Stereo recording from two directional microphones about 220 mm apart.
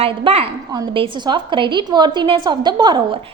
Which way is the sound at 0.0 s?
25° right (ahead or behind).